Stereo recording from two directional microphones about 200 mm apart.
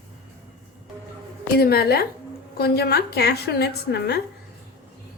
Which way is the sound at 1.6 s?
50° left (ahead or behind).